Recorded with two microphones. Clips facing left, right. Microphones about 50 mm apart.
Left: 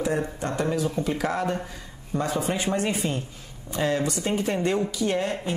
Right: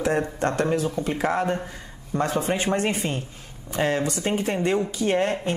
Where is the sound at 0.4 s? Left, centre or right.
Right.